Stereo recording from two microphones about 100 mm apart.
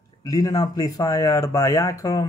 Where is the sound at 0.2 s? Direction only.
35° left (ahead or behind).